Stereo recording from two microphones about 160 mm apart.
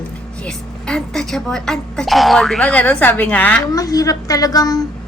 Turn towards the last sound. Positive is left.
turn(degrees=25)  # may be behind; listen again after turning